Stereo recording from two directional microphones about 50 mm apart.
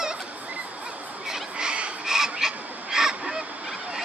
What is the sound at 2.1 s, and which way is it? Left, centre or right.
Goose, centre.